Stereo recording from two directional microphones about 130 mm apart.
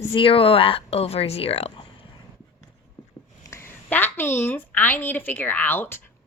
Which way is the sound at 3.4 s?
20° left (ahead or behind).